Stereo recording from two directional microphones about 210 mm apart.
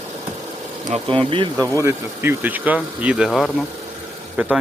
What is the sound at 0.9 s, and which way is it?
Speech, 30° right (ahead or behind).